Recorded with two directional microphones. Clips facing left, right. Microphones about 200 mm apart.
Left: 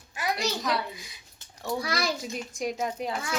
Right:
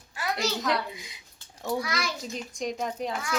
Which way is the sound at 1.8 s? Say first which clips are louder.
Left 3 dB; 35° left (ahead or behind).